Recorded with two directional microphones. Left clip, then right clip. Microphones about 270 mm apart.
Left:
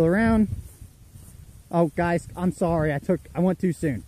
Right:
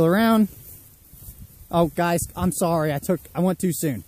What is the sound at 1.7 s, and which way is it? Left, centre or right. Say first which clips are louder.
Speech: right 2 dB; centre.